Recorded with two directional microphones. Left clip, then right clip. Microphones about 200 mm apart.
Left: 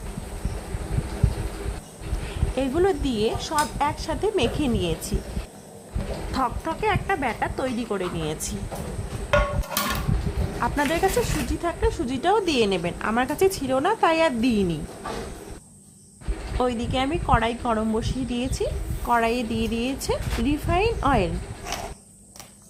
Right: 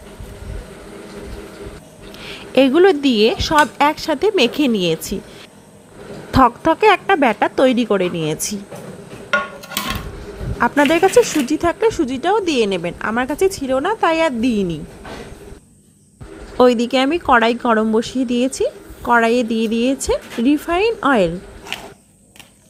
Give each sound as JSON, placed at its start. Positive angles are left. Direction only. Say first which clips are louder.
{"t": 2.6, "sound": "a woman's voice", "louder": "right 11 dB", "side_deg": -25}
{"t": 6.3, "sound": "a woman's voice", "louder": "right 13 dB", "side_deg": -30}
{"t": 10.6, "sound": "a woman's voice", "louder": "right 9 dB", "side_deg": -25}
{"t": 16.6, "sound": "a woman's voice", "louder": "right 11 dB", "side_deg": -25}